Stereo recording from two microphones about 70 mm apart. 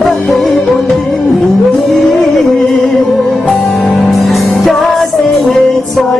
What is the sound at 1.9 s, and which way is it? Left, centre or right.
Music, centre.